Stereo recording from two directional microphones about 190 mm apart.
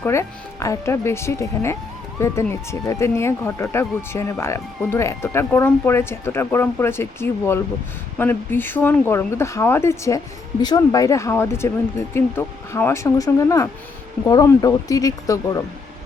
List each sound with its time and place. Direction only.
0.0 s speech: 15° left (ahead or behind)